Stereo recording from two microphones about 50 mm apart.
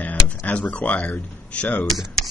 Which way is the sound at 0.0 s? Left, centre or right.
Left.